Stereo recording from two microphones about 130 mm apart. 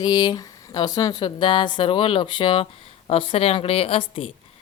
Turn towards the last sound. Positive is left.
turn(degrees=45)  # may be behind; listen again after turning